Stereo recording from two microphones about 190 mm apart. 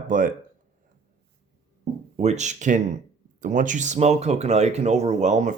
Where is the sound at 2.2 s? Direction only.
35° right (ahead or behind).